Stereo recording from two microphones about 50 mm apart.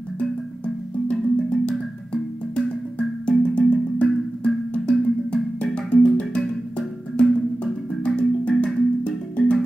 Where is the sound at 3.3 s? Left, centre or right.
Left.